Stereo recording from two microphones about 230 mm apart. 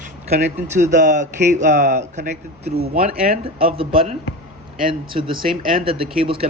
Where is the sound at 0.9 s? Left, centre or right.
Right.